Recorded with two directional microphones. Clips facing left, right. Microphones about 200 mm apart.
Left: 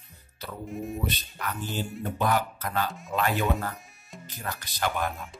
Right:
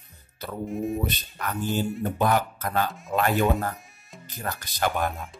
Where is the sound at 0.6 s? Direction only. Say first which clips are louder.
Right 6 dB; centre (ahead or behind).